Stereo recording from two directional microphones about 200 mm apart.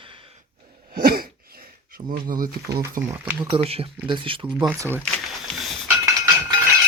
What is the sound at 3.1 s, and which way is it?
Speech, 25° right (ahead or behind).